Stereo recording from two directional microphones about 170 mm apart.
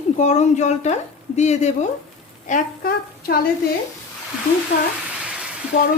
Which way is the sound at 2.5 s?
60° left (ahead or behind).